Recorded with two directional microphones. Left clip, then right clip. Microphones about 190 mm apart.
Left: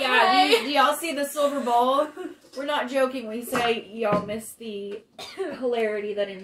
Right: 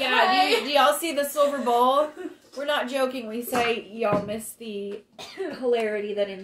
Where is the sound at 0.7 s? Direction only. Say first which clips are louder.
Right 1 dB; 25° right (ahead or behind).